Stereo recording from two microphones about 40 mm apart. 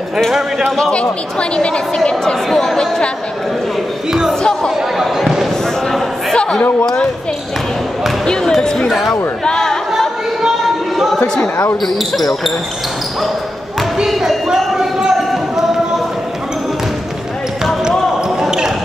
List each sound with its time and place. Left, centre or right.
2.5 s speech: centre
4.6 s chatter: centre
5.1 s basketball bounce: centre
6.3 s a sound: left
8.8 s speech: centre
9.4 s chatter: centre
11.8 s speech: centre
14.7 s a sound: centre